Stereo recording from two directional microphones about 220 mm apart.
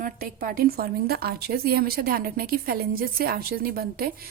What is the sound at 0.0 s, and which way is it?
A woman's voice, 40° right (ahead or behind).